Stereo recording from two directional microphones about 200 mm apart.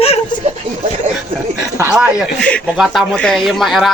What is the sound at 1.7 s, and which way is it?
Speech, 10° right (ahead or behind).